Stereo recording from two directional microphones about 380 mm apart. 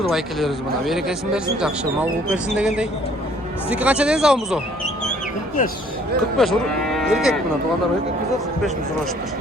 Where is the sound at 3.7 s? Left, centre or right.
Centre.